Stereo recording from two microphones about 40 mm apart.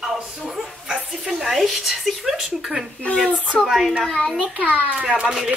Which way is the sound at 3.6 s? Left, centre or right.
Centre.